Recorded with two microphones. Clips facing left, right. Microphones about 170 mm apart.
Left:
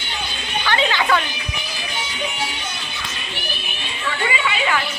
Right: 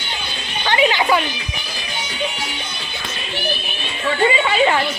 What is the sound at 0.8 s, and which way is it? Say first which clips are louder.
Music: right 4 dB; 15° right (ahead or behind).